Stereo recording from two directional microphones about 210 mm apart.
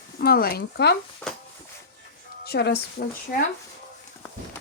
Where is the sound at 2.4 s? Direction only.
50° left (ahead or behind).